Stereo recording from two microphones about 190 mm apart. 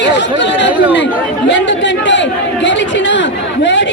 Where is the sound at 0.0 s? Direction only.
65° left (ahead or behind).